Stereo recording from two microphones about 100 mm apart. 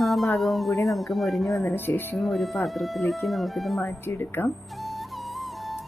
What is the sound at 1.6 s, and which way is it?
Speech, 20° left (ahead or behind).